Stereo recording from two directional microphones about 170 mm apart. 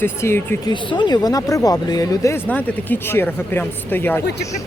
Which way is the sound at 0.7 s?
25° left (ahead or behind).